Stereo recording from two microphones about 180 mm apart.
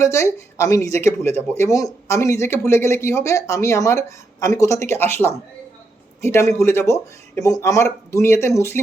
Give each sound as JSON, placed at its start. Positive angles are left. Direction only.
{"t": 0.0, "sound": "speech", "side_deg": 15}